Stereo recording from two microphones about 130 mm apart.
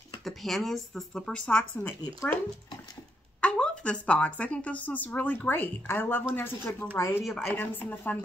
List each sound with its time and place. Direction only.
0.2 s speech: centre (ahead or behind)
3.3 s a woman's voice: 10° left (ahead or behind)
7.2 s speech: centre (ahead or behind)
7.5 s a woman's voice: 15° left (ahead or behind)